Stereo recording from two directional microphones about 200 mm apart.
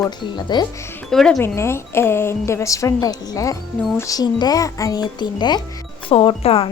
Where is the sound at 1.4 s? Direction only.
10° left (ahead or behind).